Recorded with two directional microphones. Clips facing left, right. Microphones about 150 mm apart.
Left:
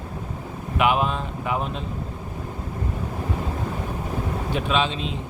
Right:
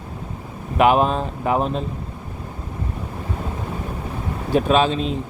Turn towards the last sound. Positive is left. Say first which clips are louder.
# right 6 dB
turn(degrees=-40)  # may be behind; listen again after turning